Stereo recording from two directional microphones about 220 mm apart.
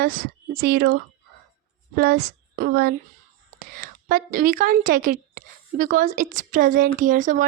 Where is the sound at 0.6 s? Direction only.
45° right (ahead or behind).